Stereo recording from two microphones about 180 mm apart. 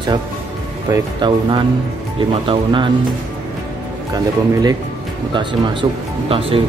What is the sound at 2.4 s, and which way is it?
Speech, 25° right (ahead or behind).